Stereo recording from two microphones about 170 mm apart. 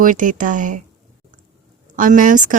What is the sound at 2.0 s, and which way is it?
Speech, 50° right (ahead or behind).